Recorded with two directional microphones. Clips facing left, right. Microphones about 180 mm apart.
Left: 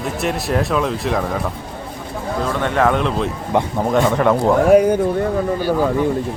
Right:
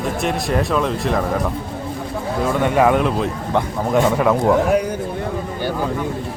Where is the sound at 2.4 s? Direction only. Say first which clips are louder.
Right 2 dB; 10° right (ahead or behind).